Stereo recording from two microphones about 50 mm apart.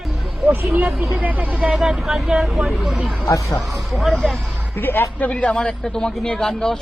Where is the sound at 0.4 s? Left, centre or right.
Right.